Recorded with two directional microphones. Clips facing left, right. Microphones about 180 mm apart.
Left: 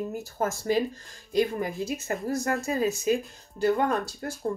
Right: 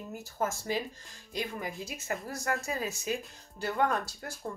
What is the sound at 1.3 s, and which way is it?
Speech, 35° left (ahead or behind).